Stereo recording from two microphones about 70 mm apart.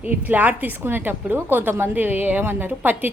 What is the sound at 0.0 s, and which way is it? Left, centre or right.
A woman's voice, right.